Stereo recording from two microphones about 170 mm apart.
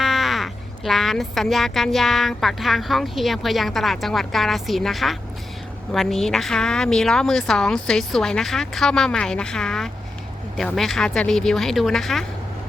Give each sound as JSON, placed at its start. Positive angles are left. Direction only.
{"t": 0.0, "sound": "speech", "side_deg": 0}